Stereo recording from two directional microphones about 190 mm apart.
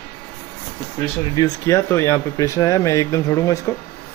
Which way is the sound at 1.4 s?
15° left (ahead or behind).